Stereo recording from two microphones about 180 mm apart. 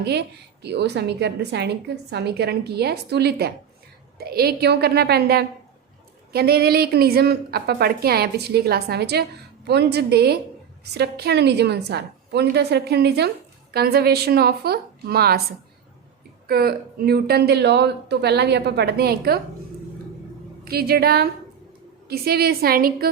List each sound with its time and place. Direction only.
0.0 s a woman's voice: 65° right (ahead or behind)
16.5 s a woman's voice: 60° right (ahead or behind)
20.7 s a woman's voice: 60° right (ahead or behind)